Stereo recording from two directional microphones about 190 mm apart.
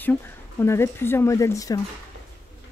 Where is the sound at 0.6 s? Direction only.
15° left (ahead or behind).